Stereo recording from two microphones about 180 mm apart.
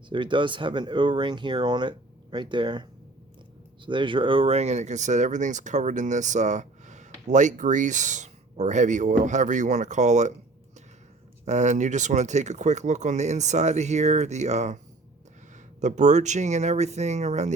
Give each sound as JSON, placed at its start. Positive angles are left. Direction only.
{"t": 0.1, "sound": "speech", "side_deg": -25}
{"t": 3.8, "sound": "speech", "side_deg": -25}
{"t": 11.4, "sound": "speech", "side_deg": -40}
{"t": 15.8, "sound": "speech", "side_deg": -40}